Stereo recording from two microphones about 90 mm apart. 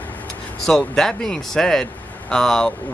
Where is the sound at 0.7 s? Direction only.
5° left (ahead or behind).